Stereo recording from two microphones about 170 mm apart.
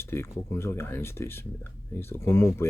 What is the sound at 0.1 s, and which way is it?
Speech, 15° left (ahead or behind).